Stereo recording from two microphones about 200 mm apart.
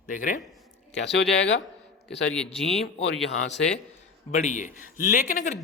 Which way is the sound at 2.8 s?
60° left (ahead or behind).